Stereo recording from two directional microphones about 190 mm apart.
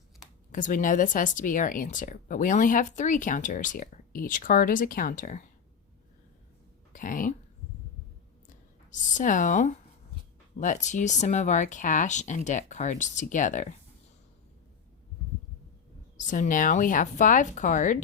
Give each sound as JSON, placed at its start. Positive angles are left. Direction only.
{"t": 0.5, "sound": "speech", "side_deg": 45}
{"t": 6.9, "sound": "speech", "side_deg": 45}
{"t": 8.9, "sound": "speech", "side_deg": 40}
{"t": 16.1, "sound": "speech", "side_deg": 40}